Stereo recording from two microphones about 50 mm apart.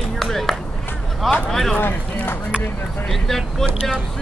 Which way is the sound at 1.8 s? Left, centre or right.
Left.